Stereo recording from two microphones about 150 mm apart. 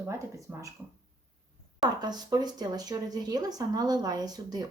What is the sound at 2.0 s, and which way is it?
Speech, 30° right (ahead or behind).